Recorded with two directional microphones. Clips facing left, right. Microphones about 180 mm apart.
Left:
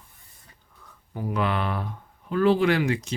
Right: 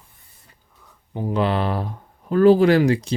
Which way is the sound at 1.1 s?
30° right (ahead or behind).